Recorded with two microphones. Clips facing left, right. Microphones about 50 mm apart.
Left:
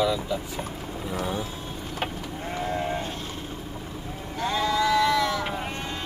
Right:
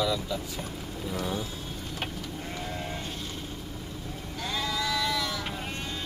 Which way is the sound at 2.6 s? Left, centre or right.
Left.